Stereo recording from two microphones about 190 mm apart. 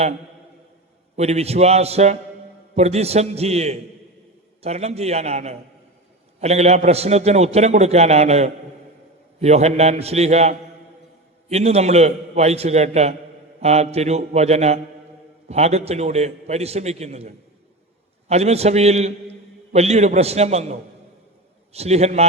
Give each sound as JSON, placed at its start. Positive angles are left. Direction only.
{"t": 1.1, "sound": "a man's voice", "side_deg": -35}